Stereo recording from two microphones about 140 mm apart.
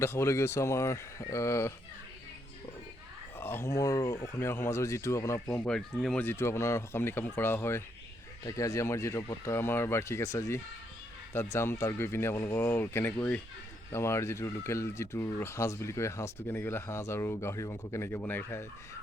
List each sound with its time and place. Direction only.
0.0 s speech: 20° left (ahead or behind)
3.3 s speech: 15° left (ahead or behind)
5.6 s speech: 5° left (ahead or behind)
6.2 s speech: 20° left (ahead or behind)
13.9 s speech: 20° left (ahead or behind)